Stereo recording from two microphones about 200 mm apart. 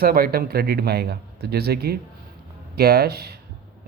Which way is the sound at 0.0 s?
50° right (ahead or behind).